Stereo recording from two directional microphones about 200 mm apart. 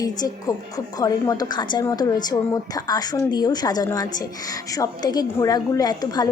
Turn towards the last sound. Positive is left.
turn(degrees=20)  # may be behind; listen again after turning